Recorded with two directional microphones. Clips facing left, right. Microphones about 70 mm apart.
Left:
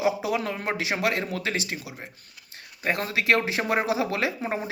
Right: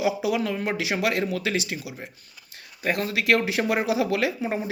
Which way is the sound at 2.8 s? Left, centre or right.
Left.